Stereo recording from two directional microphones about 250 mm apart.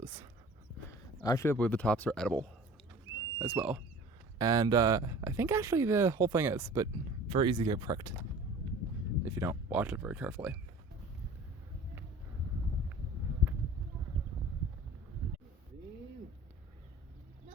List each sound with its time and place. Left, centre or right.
0.0 s a sound: centre
1.2 s speech: centre
9.2 s speech: centre